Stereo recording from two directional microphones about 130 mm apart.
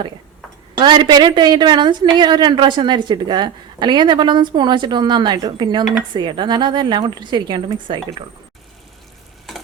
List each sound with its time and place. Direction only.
0.8 s a woman's voice: 35° right (ahead or behind)